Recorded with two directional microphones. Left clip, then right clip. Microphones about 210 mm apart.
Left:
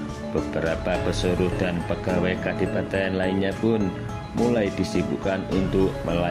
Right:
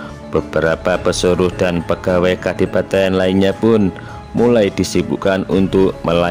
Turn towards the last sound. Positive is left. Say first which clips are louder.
# right 10 dB
turn(degrees=-45)  # may be behind; listen again after turning